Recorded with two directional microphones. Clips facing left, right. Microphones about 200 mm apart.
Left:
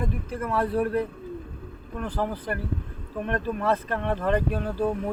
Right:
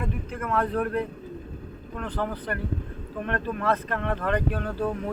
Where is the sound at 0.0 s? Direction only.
35° left (ahead or behind).